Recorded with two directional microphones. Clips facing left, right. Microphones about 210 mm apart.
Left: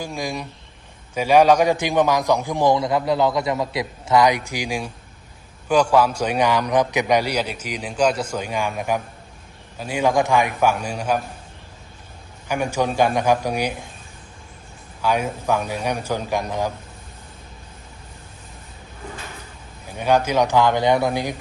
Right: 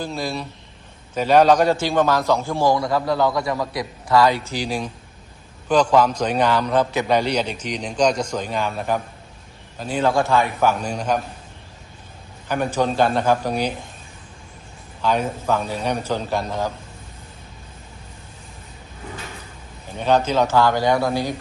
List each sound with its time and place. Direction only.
0.0 s a man's voice: 15° left (ahead or behind)
12.5 s a man's voice: 10° left (ahead or behind)
15.0 s a man's voice: 10° left (ahead or behind)
19.9 s a man's voice: 10° left (ahead or behind)